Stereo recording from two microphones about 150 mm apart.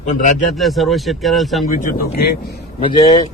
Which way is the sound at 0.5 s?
Centre (ahead or behind).